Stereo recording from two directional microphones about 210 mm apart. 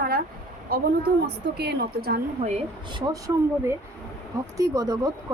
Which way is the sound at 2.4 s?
30° right (ahead or behind).